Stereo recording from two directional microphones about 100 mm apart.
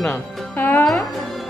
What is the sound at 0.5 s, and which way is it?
Music, 20° left (ahead or behind).